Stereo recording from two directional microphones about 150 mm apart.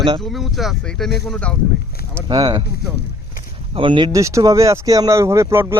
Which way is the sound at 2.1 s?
25° right (ahead or behind).